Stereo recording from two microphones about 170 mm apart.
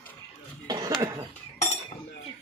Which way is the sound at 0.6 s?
25° right (ahead or behind).